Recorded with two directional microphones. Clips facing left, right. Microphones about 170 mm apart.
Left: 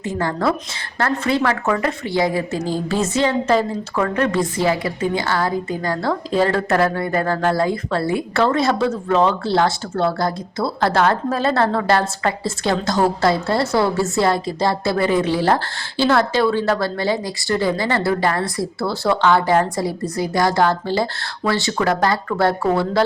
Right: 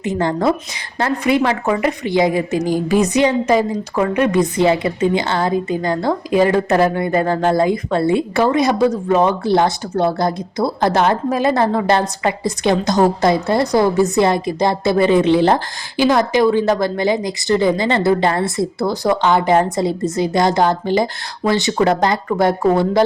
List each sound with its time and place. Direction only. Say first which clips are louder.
0.0 s speech: right 3 dB; 20° right (ahead or behind)